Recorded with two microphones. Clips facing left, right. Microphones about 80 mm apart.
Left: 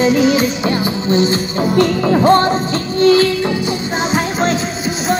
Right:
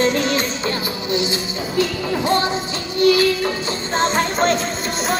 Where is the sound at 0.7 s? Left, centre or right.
Left.